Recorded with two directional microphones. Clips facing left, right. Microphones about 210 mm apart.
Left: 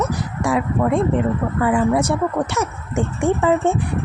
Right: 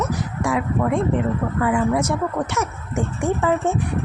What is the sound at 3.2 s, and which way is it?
Speech, 30° left (ahead or behind).